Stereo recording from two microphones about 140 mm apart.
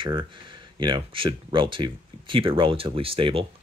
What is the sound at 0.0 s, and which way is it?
Speech, 35° right (ahead or behind).